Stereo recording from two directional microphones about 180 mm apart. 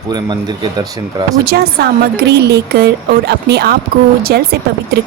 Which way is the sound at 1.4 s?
60° right (ahead or behind).